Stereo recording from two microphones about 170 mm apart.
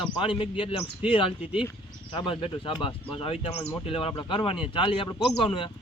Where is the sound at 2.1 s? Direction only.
30° left (ahead or behind).